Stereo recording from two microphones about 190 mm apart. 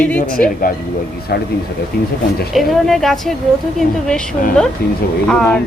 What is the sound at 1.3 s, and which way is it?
Speech, 60° left (ahead or behind).